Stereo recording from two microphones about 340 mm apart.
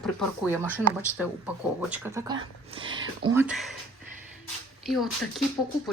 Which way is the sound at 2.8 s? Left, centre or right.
Right.